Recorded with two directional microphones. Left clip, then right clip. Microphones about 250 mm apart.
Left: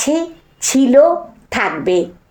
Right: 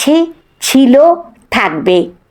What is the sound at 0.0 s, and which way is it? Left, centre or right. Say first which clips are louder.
A woman's voice: right 7 dB; right.